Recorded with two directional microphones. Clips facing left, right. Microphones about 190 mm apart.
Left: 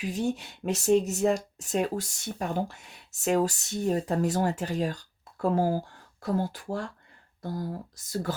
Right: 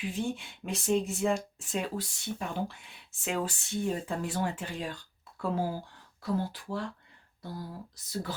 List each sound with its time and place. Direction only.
0.1 s speech: 40° left (ahead or behind)